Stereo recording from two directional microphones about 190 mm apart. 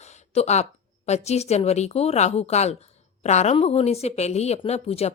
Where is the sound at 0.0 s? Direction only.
35° left (ahead or behind).